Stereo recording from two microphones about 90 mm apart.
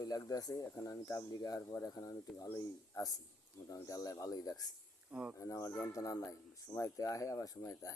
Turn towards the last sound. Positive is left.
turn(degrees=35)  # may be behind; listen again after turning